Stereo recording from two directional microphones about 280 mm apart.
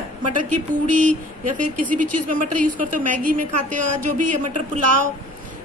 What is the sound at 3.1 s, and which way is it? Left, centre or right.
Speech, right.